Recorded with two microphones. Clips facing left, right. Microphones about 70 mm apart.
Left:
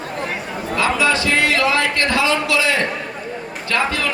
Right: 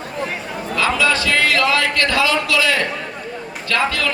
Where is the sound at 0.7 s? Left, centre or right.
Left.